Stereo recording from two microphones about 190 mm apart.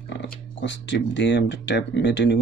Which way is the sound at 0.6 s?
70° left (ahead or behind).